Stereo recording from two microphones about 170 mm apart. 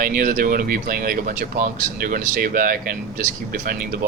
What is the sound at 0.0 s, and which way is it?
Speech, 55° right (ahead or behind).